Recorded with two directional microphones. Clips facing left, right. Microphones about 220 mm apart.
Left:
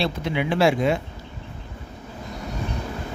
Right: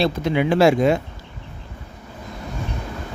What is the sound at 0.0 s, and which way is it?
Speech, 45° right (ahead or behind).